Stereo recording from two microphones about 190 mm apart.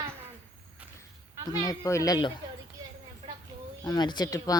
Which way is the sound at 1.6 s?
15° left (ahead or behind).